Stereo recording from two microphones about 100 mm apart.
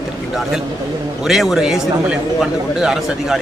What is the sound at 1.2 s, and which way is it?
A man's voice, 5° right (ahead or behind).